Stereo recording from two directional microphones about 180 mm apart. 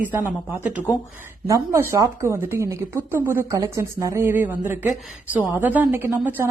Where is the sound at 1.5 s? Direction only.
15° right (ahead or behind).